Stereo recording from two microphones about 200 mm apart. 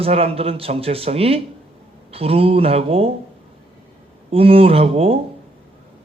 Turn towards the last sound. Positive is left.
turn(degrees=-30)  # may be behind; listen again after turning